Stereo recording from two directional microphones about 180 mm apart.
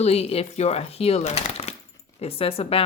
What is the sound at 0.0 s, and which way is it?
Speech, 35° left (ahead or behind).